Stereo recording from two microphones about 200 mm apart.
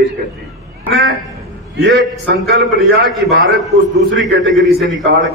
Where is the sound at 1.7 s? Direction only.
60° right (ahead or behind).